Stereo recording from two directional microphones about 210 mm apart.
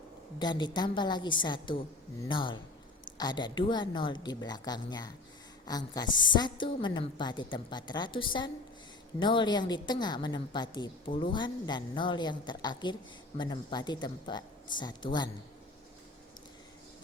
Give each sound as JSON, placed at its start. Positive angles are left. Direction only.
{"t": 0.3, "sound": "a woman's voice", "side_deg": 20}